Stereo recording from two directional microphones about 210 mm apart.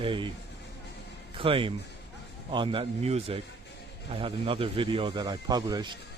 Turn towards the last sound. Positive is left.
turn(degrees=-20)  # may be behind; listen again after turning